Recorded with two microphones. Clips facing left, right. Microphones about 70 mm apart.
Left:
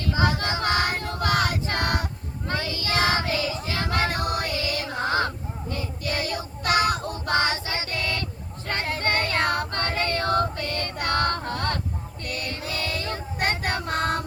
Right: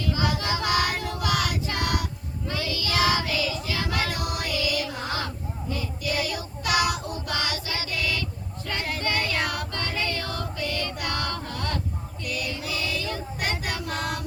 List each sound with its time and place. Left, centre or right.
0.0 s choir: left
2.5 s child singing: left
7.9 s a sound: left
8.6 s female singing: left